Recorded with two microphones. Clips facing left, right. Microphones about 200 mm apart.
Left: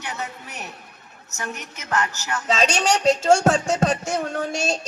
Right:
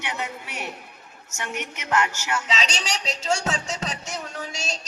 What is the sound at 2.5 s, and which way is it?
Speech, 55° left (ahead or behind).